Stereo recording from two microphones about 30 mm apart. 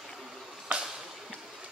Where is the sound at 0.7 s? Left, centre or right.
Right.